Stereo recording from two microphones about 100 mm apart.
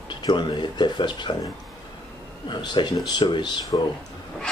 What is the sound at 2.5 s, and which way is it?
Speech, 50° left (ahead or behind).